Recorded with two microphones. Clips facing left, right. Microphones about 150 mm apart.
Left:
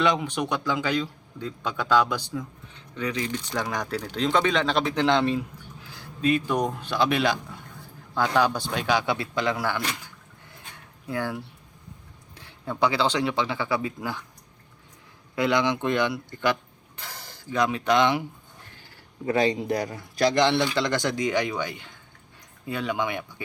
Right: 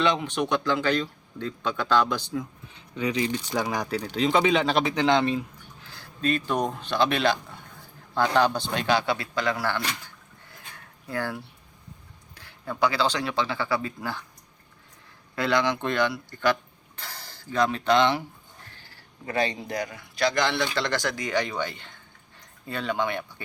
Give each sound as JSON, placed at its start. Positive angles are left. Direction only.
{"t": 0.0, "sound": "speech", "side_deg": 10}
{"t": 2.7, "sound": "speech", "side_deg": -10}
{"t": 3.6, "sound": "speech", "side_deg": -5}
{"t": 5.8, "sound": "speech", "side_deg": 10}
{"t": 11.1, "sound": "speech", "side_deg": 15}
{"t": 15.4, "sound": "speech", "side_deg": 20}
{"t": 20.7, "sound": "speech", "side_deg": 15}